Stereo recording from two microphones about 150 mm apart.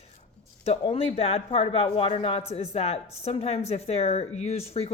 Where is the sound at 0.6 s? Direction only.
40° left (ahead or behind).